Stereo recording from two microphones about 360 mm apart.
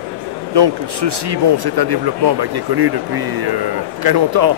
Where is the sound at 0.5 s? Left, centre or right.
Right.